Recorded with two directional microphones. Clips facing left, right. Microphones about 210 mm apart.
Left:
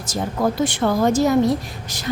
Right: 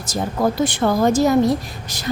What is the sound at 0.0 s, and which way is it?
Speech, 35° right (ahead or behind).